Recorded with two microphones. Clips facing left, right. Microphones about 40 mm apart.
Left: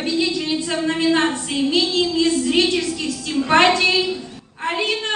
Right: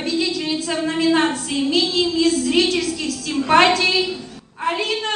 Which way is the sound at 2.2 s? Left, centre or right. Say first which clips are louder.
Right 2 dB; centre.